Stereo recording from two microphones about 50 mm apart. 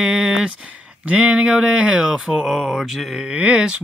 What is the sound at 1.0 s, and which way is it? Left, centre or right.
Speech, right.